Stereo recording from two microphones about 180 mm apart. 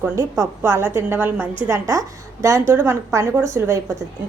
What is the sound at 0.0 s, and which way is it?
A woman's voice, 15° right (ahead or behind).